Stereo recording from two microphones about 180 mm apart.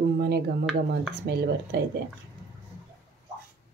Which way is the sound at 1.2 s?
65° right (ahead or behind).